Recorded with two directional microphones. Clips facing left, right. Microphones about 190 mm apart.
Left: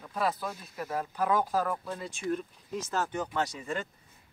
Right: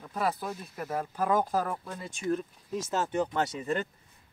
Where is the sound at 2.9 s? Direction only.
25° right (ahead or behind).